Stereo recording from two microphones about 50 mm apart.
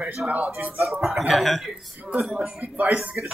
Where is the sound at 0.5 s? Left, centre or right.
Right.